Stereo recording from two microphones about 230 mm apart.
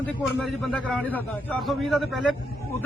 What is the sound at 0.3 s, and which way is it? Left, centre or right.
A man's voice, centre.